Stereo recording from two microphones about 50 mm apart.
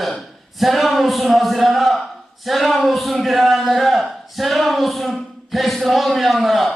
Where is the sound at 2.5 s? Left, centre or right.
Centre.